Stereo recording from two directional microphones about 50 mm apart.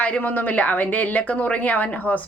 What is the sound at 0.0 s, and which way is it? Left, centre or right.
A woman's voice, left.